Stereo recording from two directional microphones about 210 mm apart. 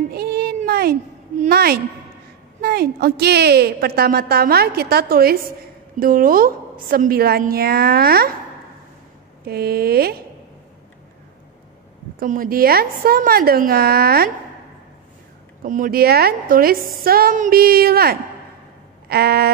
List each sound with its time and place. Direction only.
0.1 s a sound: 50° right (ahead or behind)
1.5 s a woman's voice: 45° right (ahead or behind)
9.4 s a woman's voice: 45° right (ahead or behind)
12.2 s a woman's voice: 40° right (ahead or behind)
15.6 s a woman's voice: 40° right (ahead or behind)